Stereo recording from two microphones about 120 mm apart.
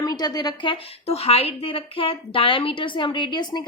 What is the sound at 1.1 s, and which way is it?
Speech, 55° left (ahead or behind).